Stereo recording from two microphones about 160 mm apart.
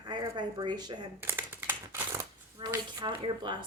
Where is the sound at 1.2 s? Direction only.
15° right (ahead or behind).